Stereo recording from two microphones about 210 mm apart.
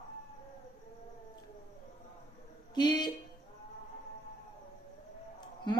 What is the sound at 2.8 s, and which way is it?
Speech, 20° left (ahead or behind).